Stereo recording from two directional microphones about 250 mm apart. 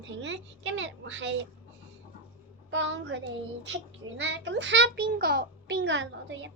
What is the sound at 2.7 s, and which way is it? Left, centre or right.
A child's voice, right.